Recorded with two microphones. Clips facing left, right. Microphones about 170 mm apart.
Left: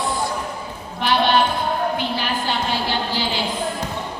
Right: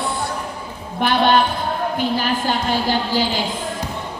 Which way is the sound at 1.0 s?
50° right (ahead or behind).